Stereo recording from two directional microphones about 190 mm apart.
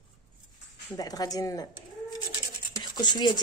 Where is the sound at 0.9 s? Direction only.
20° left (ahead or behind).